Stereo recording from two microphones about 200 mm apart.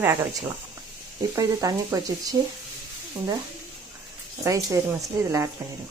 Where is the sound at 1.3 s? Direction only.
15° right (ahead or behind).